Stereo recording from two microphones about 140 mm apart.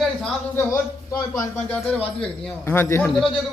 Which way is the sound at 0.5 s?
20° left (ahead or behind).